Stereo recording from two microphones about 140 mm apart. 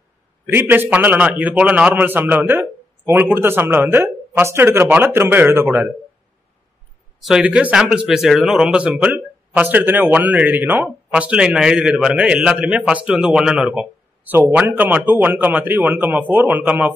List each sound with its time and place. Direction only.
0.5 s speech: 15° right (ahead or behind)
7.2 s speech: 5° right (ahead or behind)